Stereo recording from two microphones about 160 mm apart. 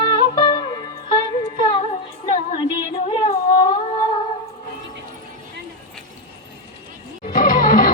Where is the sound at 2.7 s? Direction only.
35° left (ahead or behind).